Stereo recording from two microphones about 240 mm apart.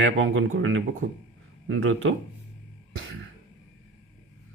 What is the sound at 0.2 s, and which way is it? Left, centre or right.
Speech, right.